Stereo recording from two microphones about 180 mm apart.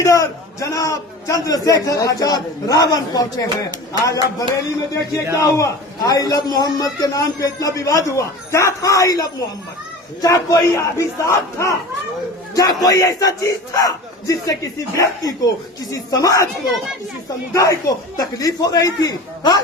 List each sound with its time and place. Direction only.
0.0 s a man's voice: 15° left (ahead or behind)
17.5 s a man's voice: 20° left (ahead or behind)